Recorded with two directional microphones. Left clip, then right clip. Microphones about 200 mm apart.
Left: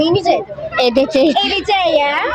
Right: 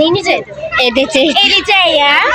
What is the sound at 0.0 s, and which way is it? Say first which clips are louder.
Children playing: right 2 dB; 25° left (ahead or behind).